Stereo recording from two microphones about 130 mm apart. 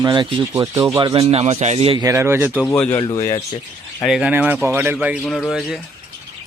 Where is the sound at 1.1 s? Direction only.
50° right (ahead or behind).